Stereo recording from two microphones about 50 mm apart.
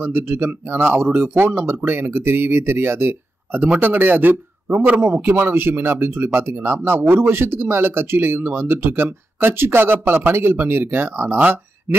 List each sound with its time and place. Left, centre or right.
0.0 s a man's voice: right
5.1 s speech: right
6.8 s speech: right
11.3 s a man's voice: right